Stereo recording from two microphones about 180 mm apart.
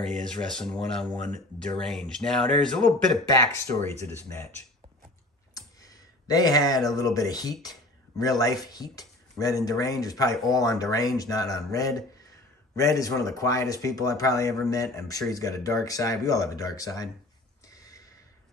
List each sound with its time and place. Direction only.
0.0 s speech: 5° left (ahead or behind)
3.3 s speech: 20° left (ahead or behind)
5.8 s speech: 20° left (ahead or behind)
17.6 s a sound: 20° left (ahead or behind)